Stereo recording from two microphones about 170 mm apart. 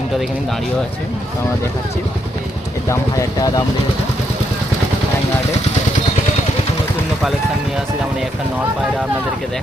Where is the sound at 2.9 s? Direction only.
20° left (ahead or behind).